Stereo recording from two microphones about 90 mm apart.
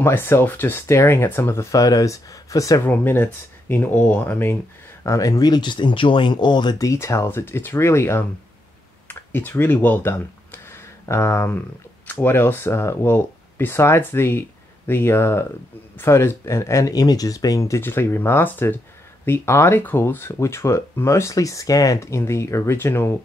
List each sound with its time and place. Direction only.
0.0 s speech: 25° left (ahead or behind)
1.7 s speech: 40° left (ahead or behind)
2.8 s speech: 25° left (ahead or behind)
5.0 s speech: 40° left (ahead or behind); by 6.8 s 55° left (ahead or behind)
6.8 s speech: 35° left (ahead or behind)
9.0 s a sound: 20° left (ahead or behind)
12.1 s speech: 25° left (ahead or behind)